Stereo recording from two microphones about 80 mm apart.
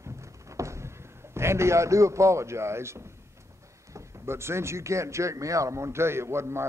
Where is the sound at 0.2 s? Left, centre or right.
Right.